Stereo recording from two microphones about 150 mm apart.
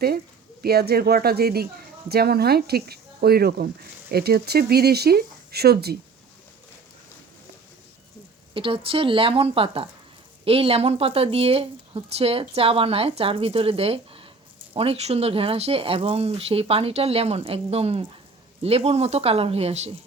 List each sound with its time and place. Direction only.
0.6 s speech: 90° right
8.5 s speech: 35° right (ahead or behind)